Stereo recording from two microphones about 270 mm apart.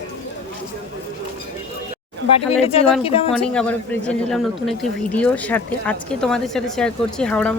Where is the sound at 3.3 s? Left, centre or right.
Centre.